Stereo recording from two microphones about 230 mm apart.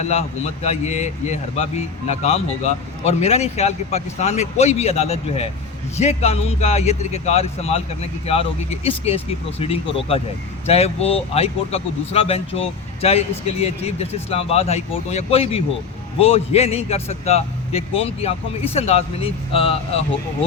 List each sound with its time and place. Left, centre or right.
0.0 s speech: left